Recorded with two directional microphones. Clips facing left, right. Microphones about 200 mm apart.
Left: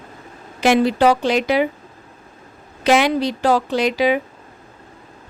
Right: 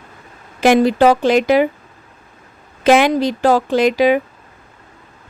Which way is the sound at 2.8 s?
55° right (ahead or behind).